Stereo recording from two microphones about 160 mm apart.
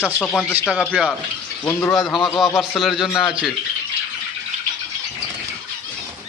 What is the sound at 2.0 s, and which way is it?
Speech, centre (ahead or behind).